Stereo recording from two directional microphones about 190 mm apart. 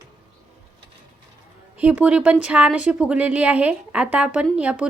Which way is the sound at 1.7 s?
10° right (ahead or behind).